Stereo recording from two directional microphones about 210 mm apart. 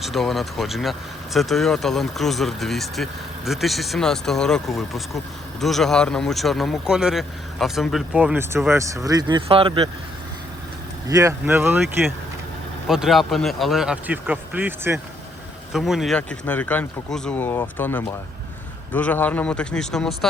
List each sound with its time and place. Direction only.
0.0 s speech: centre (ahead or behind); by 9.9 s 25° right (ahead or behind)
11.1 s speech: 15° right (ahead or behind); by 20.1 s centre (ahead or behind)